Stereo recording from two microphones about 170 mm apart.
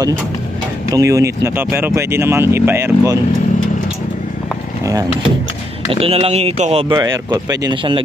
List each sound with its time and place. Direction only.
0.8 s speech: 20° right (ahead or behind)
5.9 s speech: 35° right (ahead or behind)
7.0 s speech: 25° right (ahead or behind)